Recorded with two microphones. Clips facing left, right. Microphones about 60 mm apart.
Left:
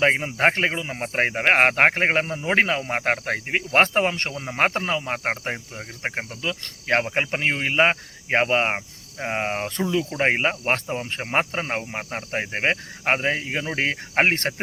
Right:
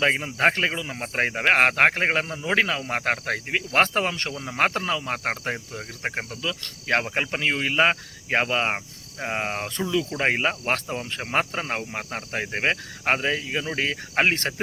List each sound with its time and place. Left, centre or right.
0.0 s speech: left
6.4 s cricket: left
13.3 s speech: left